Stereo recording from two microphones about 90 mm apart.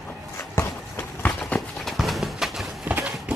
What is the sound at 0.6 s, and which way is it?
Run, 25° left (ahead or behind).